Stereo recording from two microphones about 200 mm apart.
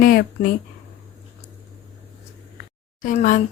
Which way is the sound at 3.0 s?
40° left (ahead or behind).